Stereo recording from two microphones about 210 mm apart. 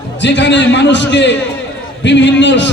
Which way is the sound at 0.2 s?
55° left (ahead or behind).